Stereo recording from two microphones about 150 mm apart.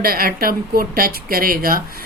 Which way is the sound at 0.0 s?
85° right.